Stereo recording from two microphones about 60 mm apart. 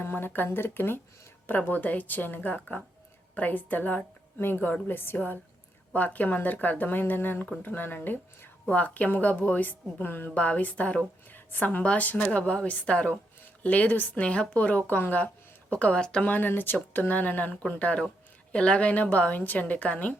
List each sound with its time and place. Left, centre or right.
0.0 s a woman's voice: left
11.8 s speech: left
15.7 s speech: centre
16.2 s a woman's voice: left